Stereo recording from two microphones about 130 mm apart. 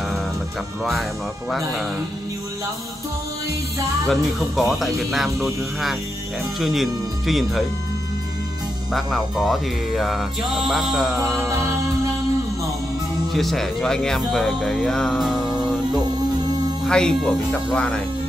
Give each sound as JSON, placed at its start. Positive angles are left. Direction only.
{"t": 4.1, "sound": "speech", "side_deg": 0}
{"t": 8.9, "sound": "speech", "side_deg": 0}
{"t": 11.4, "sound": "music", "side_deg": -20}
{"t": 13.3, "sound": "speech", "side_deg": 0}
{"t": 16.8, "sound": "speech", "side_deg": 5}